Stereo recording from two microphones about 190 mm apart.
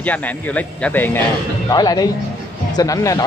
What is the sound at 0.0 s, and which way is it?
A man's voice, 10° left (ahead or behind).